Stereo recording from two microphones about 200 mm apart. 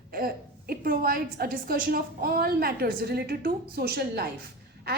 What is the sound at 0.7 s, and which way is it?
A woman's voice, 45° right (ahead or behind).